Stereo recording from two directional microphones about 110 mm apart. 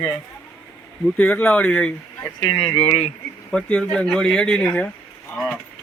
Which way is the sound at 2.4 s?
45° left (ahead or behind).